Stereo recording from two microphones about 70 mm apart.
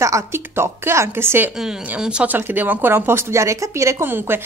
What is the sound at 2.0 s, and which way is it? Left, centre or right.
Speech, centre.